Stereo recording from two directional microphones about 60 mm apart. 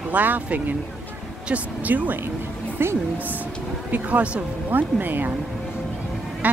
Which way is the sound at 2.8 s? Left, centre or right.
Right.